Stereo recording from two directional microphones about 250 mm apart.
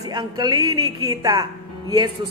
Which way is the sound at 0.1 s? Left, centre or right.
Centre.